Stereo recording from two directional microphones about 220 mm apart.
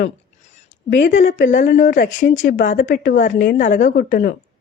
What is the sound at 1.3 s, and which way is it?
Speech, 35° left (ahead or behind).